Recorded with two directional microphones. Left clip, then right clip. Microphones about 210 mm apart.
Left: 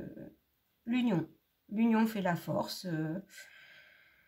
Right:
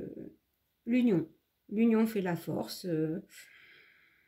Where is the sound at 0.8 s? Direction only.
25° left (ahead or behind).